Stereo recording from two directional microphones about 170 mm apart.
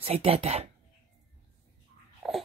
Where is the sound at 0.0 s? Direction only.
35° right (ahead or behind).